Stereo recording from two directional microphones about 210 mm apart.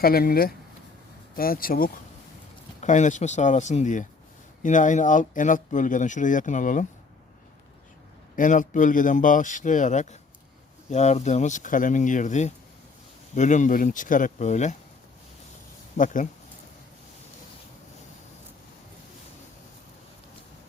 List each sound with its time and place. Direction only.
0.0 s speech: 45° left (ahead or behind)
8.4 s speech: 40° left (ahead or behind)
16.0 s speech: 35° left (ahead or behind)